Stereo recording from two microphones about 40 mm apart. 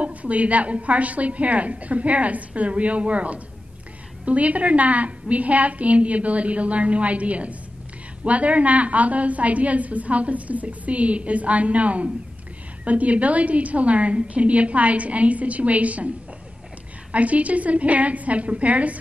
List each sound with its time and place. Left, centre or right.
0.0 s a woman's voice: right
17.1 s a woman's voice: right